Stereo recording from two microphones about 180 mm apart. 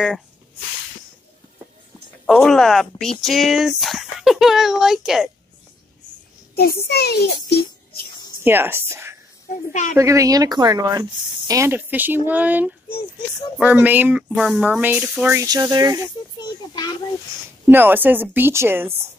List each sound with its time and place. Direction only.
2.2 s speech: centre (ahead or behind)
6.5 s a child's voice: 60° left (ahead or behind)
8.5 s speech: 10° right (ahead or behind)
9.5 s a woman's voice: 45° left (ahead or behind)
9.9 s speech: 15° right (ahead or behind)
15.4 s speech: 20° right (ahead or behind)
16.3 s a child's voice: 20° left (ahead or behind)
17.6 s speech: 10° right (ahead or behind)